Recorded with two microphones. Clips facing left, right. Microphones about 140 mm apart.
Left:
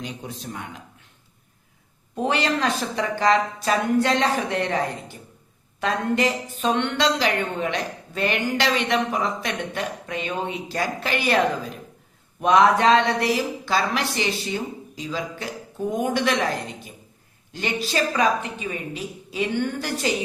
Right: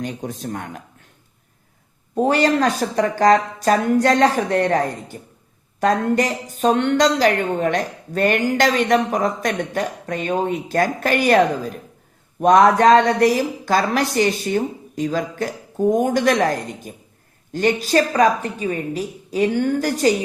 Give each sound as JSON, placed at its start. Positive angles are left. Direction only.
{"t": 0.0, "sound": "a woman's voice", "side_deg": -50}
{"t": 2.1, "sound": "a woman's voice", "side_deg": -40}